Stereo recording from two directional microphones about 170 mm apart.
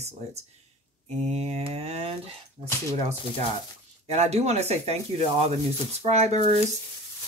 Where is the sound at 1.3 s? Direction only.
40° right (ahead or behind).